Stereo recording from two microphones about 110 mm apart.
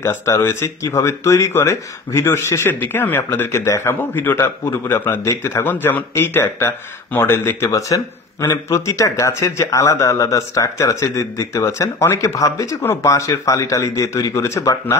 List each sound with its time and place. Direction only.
0.0 s speech: 25° left (ahead or behind)